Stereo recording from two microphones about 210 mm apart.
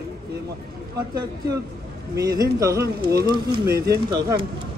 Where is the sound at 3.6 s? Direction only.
50° right (ahead or behind).